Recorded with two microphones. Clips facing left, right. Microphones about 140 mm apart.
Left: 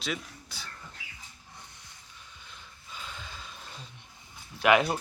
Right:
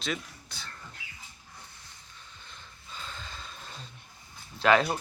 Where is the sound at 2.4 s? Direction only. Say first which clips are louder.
Even; 10° left (ahead or behind).